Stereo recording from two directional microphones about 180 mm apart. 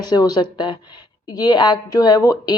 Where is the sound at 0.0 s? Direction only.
20° left (ahead or behind).